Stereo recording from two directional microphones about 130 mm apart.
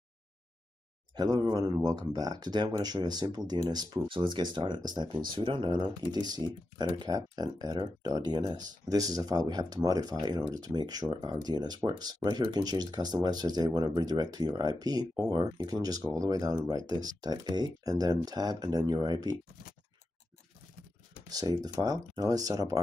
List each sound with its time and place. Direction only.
1.1 s speech: 30° right (ahead or behind)
21.3 s speech: 30° right (ahead or behind)